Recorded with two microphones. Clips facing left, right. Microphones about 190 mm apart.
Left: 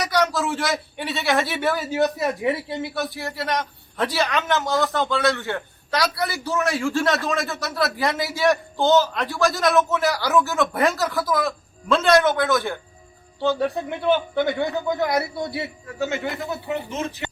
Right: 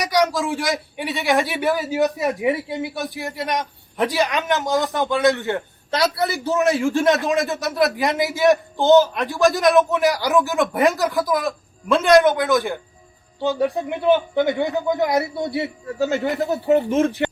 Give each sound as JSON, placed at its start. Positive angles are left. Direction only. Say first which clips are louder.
{"t": 0.0, "sound": "a man's voice", "louder": "right 2 dB", "side_deg": -15}